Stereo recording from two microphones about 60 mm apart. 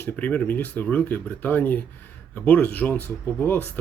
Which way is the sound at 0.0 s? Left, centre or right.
Left.